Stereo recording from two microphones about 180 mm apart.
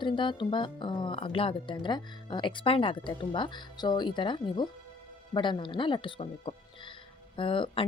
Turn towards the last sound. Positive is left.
turn(degrees=30)  # may be behind; listen again after turning